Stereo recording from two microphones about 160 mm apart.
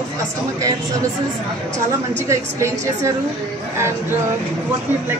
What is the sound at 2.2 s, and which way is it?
Speech, 20° right (ahead or behind).